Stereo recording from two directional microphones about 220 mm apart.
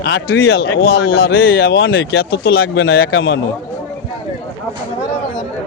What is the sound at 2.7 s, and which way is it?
Speech, 65° left (ahead or behind).